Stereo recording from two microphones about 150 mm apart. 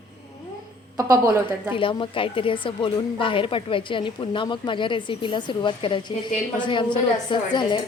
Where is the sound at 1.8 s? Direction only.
35° left (ahead or behind).